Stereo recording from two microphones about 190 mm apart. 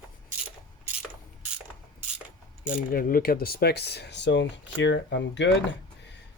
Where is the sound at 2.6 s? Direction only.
50° left (ahead or behind); by 5.5 s 70° left (ahead or behind).